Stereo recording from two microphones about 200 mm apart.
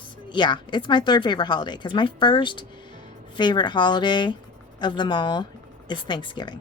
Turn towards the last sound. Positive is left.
turn(degrees=25)  # may be behind; listen again after turning